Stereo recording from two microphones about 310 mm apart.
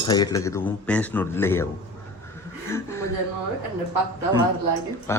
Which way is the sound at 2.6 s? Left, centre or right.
Centre.